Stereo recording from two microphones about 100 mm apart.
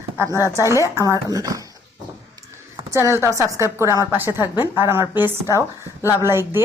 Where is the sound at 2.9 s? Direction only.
25° right (ahead or behind).